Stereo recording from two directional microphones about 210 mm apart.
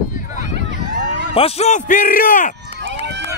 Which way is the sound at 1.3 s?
30° left (ahead or behind).